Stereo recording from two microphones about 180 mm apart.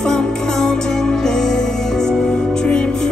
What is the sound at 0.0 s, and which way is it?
Music, 5° left (ahead or behind).